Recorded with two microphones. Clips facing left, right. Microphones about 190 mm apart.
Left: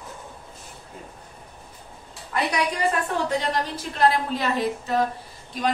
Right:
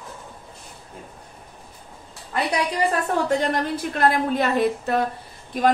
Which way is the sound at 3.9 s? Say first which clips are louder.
Right 1 dB; 55° right (ahead or behind).